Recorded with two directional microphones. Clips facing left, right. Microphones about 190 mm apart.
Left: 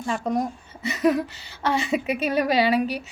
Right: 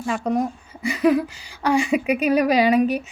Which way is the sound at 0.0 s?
5° right (ahead or behind).